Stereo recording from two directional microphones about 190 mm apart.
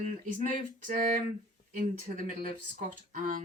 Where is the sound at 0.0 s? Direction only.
40° right (ahead or behind).